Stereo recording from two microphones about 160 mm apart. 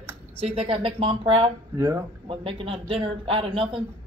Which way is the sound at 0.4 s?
35° right (ahead or behind).